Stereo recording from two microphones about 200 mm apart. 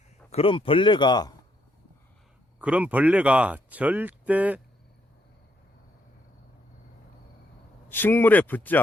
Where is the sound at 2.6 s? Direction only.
5° right (ahead or behind).